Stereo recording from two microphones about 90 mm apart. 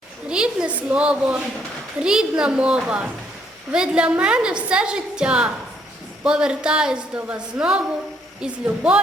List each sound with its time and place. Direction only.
0.3 s a woman's voice: 10° right (ahead or behind)